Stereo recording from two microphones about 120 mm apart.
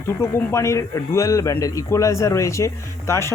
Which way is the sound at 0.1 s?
20° left (ahead or behind).